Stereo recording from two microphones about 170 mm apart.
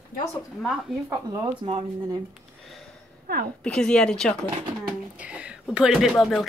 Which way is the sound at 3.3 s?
65° right (ahead or behind).